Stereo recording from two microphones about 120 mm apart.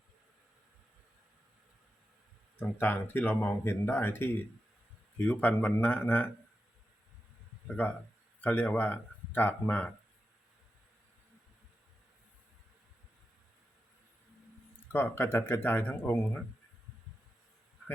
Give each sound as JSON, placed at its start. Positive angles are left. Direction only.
{"t": 2.6, "sound": "speech", "side_deg": 15}
{"t": 7.7, "sound": "speech", "side_deg": 15}
{"t": 14.9, "sound": "speech", "side_deg": 20}